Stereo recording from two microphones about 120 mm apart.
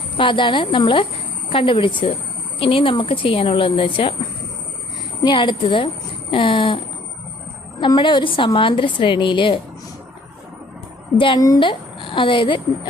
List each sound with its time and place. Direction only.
0.2 s a woman's voice: 45° left (ahead or behind)
5.2 s a woman's voice: 40° left (ahead or behind)
11.3 s speech: 30° left (ahead or behind)
11.6 s a woman's voice: 45° left (ahead or behind)